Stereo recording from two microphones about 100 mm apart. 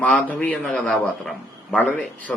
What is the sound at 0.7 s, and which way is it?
Speech, 5° left (ahead or behind).